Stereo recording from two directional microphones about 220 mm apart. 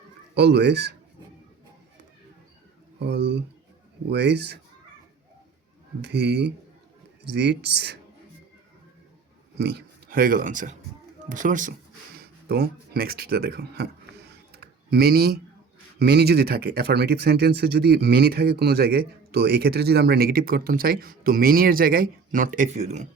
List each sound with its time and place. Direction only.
0.3 s speech: 50° right (ahead or behind)
3.0 s speech: 50° right (ahead or behind)
6.0 s speech: 50° right (ahead or behind)
9.6 s speech: 50° right (ahead or behind)
14.5 s typing: 45° right (ahead or behind)
16.0 s speech: 45° right (ahead or behind)